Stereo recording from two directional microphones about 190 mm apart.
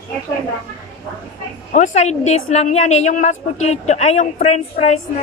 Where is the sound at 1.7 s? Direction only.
40° left (ahead or behind).